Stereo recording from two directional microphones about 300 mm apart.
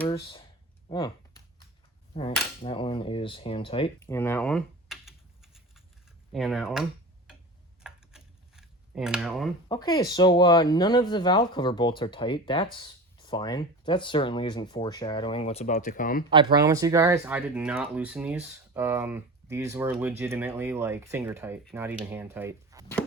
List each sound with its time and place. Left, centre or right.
0.9 s speech: centre
2.6 s speech: centre
7.9 s a sound: centre
9.6 s speech: centre
16.3 s speech: centre